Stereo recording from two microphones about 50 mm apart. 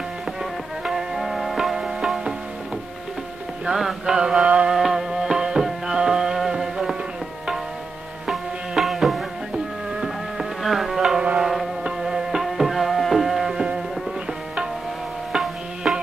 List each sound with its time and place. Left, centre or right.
0.8 s music: centre
3.6 s mantra: centre
4.5 s music: right
4.7 s music: centre
8.3 s music: centre
9.9 s insect: centre
11.0 s music: centre
15.3 s tabla: centre